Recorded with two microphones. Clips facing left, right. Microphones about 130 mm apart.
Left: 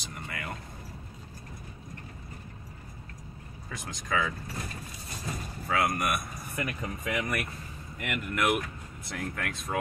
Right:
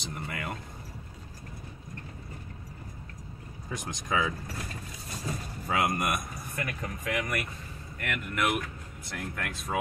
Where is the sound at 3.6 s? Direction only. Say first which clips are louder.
Right 2 dB; 20° right (ahead or behind).